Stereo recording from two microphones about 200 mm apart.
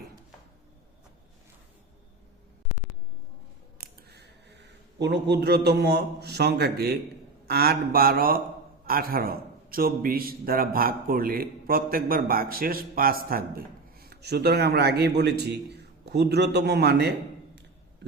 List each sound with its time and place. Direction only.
3.8 s a man's voice: 55° right (ahead or behind)